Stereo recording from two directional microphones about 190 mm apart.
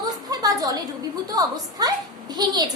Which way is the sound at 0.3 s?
20° right (ahead or behind).